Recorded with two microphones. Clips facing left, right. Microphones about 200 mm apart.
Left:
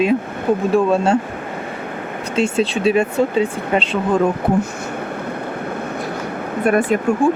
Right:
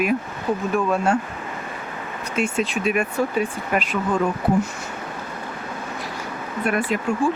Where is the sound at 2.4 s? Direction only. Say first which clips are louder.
Left 6 dB; 30° left (ahead or behind).